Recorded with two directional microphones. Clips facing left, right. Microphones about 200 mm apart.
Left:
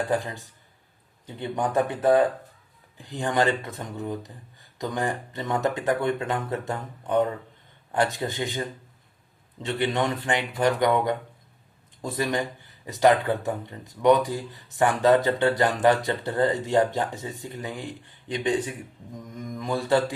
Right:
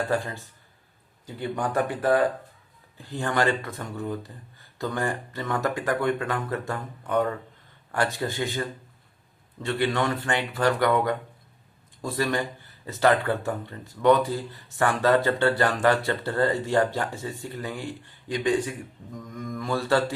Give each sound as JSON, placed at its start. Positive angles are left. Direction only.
{"t": 0.1, "sound": "speech", "side_deg": 15}
{"t": 9.6, "sound": "speech", "side_deg": 20}